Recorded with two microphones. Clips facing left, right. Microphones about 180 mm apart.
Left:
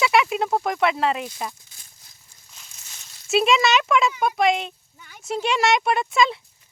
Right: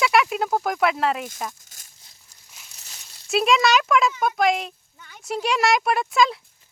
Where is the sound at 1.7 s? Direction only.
45° right (ahead or behind).